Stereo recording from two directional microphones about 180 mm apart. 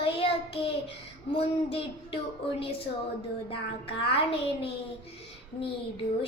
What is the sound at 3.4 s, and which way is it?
A child's voice, 30° left (ahead or behind).